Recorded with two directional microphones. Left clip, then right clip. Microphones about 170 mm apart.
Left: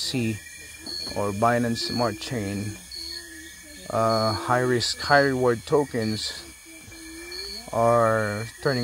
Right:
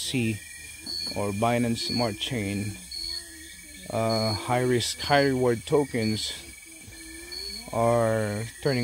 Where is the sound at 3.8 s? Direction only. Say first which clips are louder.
Left 4 dB; 5° right (ahead or behind).